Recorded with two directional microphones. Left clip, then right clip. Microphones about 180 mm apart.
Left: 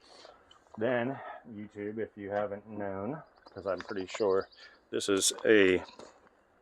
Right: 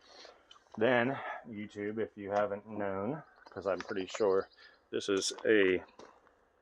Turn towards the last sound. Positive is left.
turn(degrees=70)  # may be behind; listen again after turning